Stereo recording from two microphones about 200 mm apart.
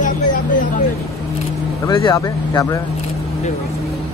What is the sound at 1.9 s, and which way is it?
Speech, 20° left (ahead or behind).